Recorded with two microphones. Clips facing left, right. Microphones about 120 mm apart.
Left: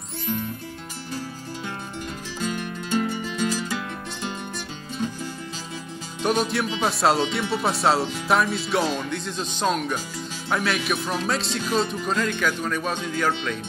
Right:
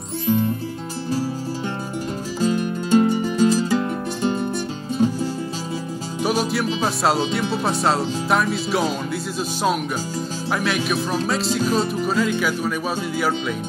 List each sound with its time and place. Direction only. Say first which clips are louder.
0.3 s music: right 9 dB; 30° right (ahead or behind)
2.4 s music: right 8 dB; 30° right (ahead or behind)
6.2 s music: right 1 dB; 5° right (ahead or behind)
6.8 s speech: left 1 dB; centre (ahead or behind)